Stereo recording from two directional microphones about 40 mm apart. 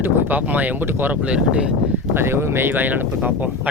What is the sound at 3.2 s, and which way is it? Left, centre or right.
Speech, right.